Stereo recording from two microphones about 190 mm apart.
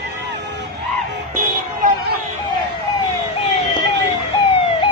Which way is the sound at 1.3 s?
50° right (ahead or behind).